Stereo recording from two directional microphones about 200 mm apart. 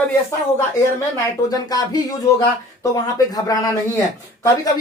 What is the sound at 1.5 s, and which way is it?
Speech, 20° left (ahead or behind).